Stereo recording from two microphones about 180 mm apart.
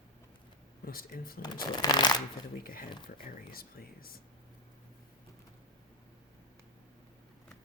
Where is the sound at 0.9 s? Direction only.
55° left (ahead or behind).